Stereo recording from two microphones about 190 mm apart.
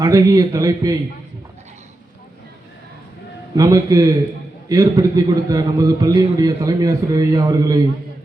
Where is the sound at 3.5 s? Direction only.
20° right (ahead or behind).